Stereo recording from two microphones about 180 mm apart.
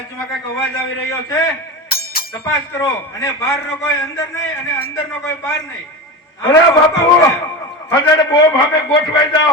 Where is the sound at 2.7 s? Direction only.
15° left (ahead or behind).